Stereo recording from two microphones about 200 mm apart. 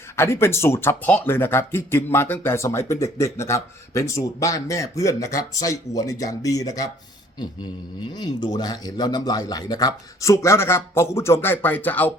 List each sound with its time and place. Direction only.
0.2 s speech: 10° left (ahead or behind)
8.1 s speech: 20° left (ahead or behind)